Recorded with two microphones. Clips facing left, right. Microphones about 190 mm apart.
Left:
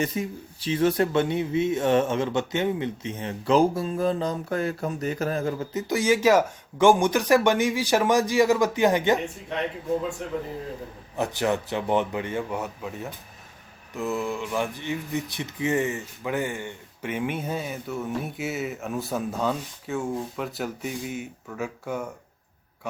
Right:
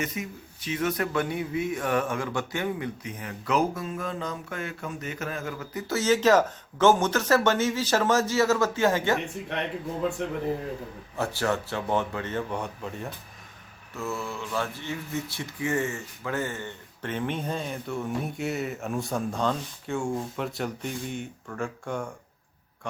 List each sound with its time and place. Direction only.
0.0 s speech: 30° left (ahead or behind)
5.7 s speech: 15° left (ahead or behind)
11.2 s speech: 15° left (ahead or behind)
13.9 s speech: 15° left (ahead or behind)